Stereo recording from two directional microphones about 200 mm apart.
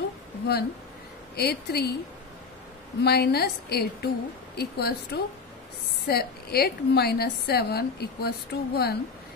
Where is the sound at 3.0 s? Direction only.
55° left (ahead or behind).